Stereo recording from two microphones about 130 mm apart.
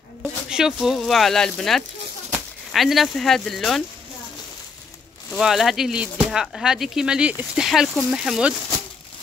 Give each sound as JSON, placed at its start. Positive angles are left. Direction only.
{"t": 0.2, "sound": "speech", "side_deg": -5}
{"t": 5.3, "sound": "speech", "side_deg": 0}